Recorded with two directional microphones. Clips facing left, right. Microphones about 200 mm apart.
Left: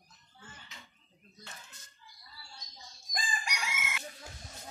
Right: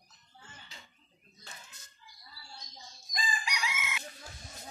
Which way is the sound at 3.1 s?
50° left (ahead or behind).